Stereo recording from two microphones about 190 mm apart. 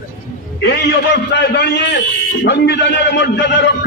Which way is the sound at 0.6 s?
65° left (ahead or behind).